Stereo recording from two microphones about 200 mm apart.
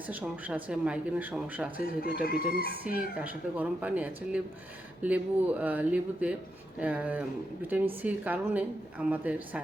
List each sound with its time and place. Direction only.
0.1 s speech: 10° right (ahead or behind)
1.8 s speech: 45° left (ahead or behind)
3.2 s speech: 5° right (ahead or behind)